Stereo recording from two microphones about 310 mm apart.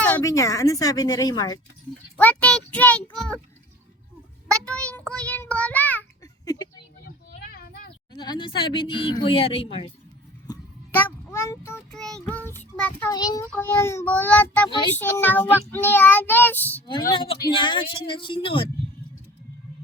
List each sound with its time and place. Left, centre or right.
0.3 s speech: centre
2.1 s child singing: centre
4.6 s child singing: centre
7.5 s a sound: left
8.1 s a child's voice: centre
13.6 s child singing: centre
17.2 s speech: centre